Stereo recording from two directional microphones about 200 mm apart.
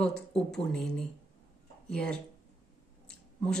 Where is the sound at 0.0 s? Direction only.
5° left (ahead or behind).